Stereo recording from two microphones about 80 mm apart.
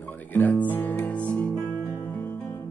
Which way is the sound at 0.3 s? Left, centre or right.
Left.